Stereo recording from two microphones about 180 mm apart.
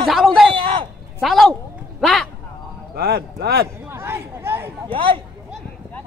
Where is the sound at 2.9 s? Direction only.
60° right (ahead or behind).